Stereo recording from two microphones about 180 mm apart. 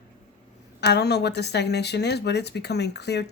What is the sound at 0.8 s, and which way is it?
Speech, 65° left (ahead or behind).